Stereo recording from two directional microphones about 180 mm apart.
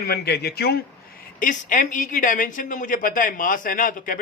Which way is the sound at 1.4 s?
45° left (ahead or behind).